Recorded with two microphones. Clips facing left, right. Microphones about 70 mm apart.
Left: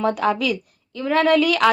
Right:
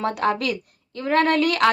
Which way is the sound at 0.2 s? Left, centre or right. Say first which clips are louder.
Left 2 dB; right.